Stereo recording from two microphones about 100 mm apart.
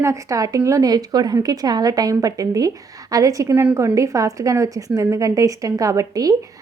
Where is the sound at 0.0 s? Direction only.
35° right (ahead or behind).